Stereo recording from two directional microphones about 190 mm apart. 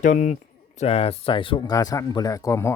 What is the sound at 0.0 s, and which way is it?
Speech, 40° left (ahead or behind).